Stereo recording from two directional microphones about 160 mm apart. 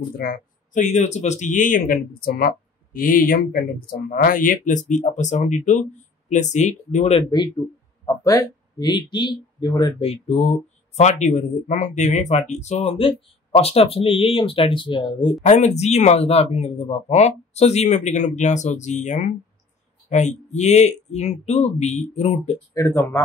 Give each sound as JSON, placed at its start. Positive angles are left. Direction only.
{"t": 0.2, "sound": "speech", "side_deg": 65}
{"t": 0.8, "sound": "speech", "side_deg": 45}
{"t": 7.2, "sound": "speech", "side_deg": 25}
{"t": 10.0, "sound": "speech", "side_deg": 40}
{"t": 15.4, "sound": "speech", "side_deg": 45}
{"t": 22.8, "sound": "speech", "side_deg": 15}